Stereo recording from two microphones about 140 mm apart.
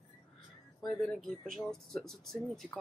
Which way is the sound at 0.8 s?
5° left (ahead or behind).